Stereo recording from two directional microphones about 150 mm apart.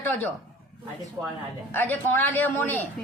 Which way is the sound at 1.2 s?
20° right (ahead or behind).